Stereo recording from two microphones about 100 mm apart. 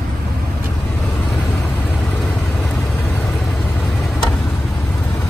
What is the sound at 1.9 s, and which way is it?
Vehicle, 5° left (ahead or behind).